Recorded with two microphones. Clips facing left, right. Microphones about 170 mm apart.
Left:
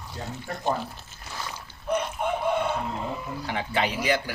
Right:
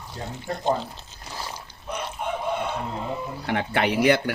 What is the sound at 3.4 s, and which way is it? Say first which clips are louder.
Speech: right 4 dB; 55° right (ahead or behind).